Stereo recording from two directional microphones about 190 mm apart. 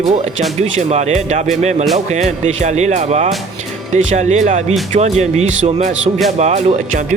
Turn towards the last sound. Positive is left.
turn(degrees=-35)  # may be behind; listen again after turning